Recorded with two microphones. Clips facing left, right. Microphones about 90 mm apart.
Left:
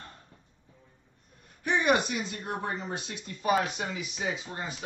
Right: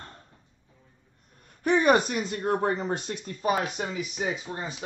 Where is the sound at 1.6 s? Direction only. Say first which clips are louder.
Right 5 dB; 45° right (ahead or behind).